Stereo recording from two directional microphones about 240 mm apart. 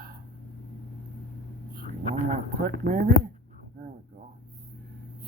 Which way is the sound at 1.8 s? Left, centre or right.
Right.